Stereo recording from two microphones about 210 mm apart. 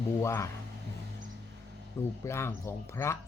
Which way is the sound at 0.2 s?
15° left (ahead or behind).